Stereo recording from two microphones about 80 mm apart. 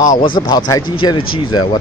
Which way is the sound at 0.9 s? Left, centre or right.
Left.